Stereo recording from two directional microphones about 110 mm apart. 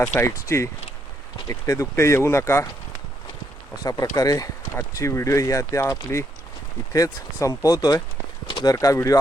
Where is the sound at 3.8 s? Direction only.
30° left (ahead or behind).